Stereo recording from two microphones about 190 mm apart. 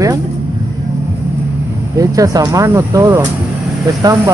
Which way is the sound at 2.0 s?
20° right (ahead or behind).